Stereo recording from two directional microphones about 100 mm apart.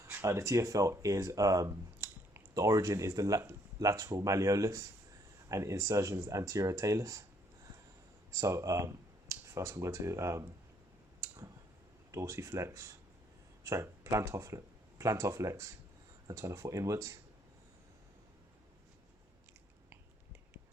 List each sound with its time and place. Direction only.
0.1 s speech: 30° right (ahead or behind)
12.1 s speech: 30° right (ahead or behind)